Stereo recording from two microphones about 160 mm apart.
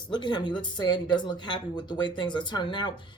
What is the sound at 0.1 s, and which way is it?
Speech, 30° left (ahead or behind).